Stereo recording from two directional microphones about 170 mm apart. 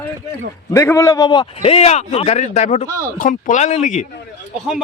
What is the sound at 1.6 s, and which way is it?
Speech, 35° left (ahead or behind).